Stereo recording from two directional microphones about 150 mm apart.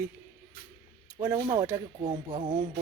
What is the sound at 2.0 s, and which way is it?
Speech, 40° right (ahead or behind).